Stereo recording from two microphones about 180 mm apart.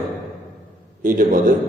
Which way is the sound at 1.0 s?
50° right (ahead or behind).